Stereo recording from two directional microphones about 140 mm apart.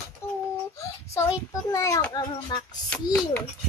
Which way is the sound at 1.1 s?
20° left (ahead or behind).